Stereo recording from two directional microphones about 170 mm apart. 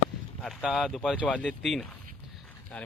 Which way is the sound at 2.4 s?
5° left (ahead or behind).